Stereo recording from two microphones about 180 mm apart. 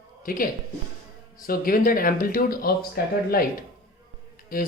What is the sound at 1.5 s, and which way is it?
Speech, 50° left (ahead or behind).